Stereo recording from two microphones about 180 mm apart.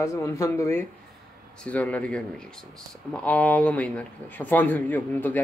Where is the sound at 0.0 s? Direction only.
15° left (ahead or behind).